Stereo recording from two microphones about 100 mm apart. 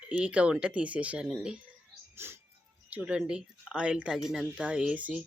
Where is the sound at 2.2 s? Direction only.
25° right (ahead or behind).